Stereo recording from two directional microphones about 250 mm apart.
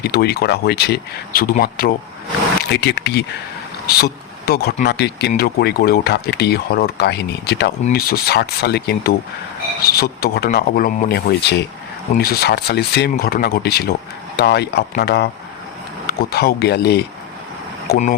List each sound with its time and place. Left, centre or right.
0.0 s speech: left